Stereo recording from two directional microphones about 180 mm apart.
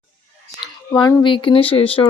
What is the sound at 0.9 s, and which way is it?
Speech, 25° left (ahead or behind).